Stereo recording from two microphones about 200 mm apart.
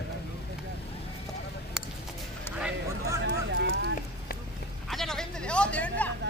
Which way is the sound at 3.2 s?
65° right (ahead or behind).